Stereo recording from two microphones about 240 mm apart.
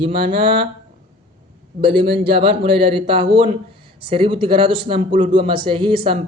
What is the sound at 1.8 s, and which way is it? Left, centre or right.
A man's voice, right.